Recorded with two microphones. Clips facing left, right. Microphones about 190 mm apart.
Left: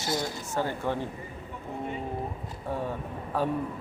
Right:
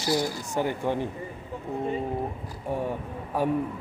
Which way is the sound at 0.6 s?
15° right (ahead or behind).